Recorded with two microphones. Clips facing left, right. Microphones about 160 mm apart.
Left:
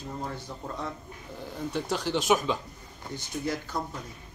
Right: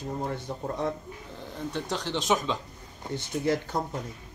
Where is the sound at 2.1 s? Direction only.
5° left (ahead or behind).